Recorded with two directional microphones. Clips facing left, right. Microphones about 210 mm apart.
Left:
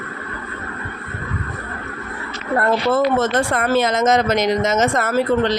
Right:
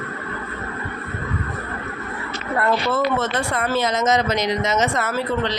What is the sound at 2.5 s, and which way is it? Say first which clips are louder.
Speech: left 4 dB; 50° left (ahead or behind).